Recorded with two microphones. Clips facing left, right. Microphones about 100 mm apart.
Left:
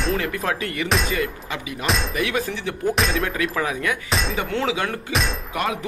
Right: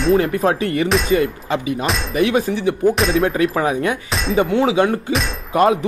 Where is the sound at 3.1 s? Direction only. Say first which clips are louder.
Right 7 dB; 30° right (ahead or behind).